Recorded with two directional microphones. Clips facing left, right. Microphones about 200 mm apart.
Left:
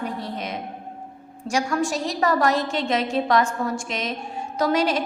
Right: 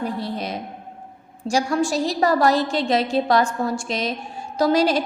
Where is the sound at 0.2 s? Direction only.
35° right (ahead or behind).